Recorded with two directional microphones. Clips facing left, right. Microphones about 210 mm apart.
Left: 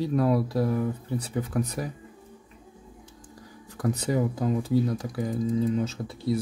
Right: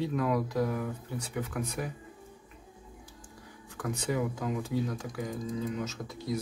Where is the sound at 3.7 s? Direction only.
35° left (ahead or behind).